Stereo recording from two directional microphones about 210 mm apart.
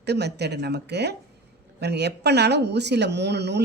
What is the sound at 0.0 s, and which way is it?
Speech, 50° right (ahead or behind).